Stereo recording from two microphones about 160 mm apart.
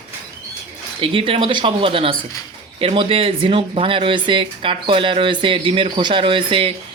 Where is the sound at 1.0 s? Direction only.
35° right (ahead or behind).